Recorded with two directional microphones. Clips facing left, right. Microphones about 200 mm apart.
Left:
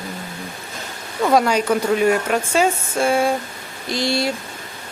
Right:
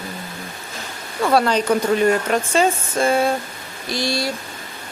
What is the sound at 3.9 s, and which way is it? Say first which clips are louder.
Speech: left 2 dB; 20° left (ahead or behind).